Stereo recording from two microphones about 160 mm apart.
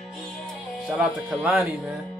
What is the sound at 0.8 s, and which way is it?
Speech, 5° right (ahead or behind).